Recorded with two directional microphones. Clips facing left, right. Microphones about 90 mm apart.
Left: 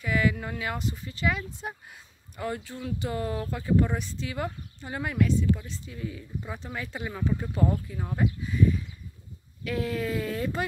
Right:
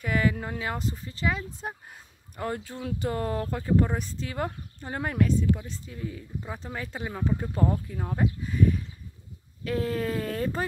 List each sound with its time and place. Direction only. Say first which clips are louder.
0.0 s speech: even; 40° right (ahead or behind)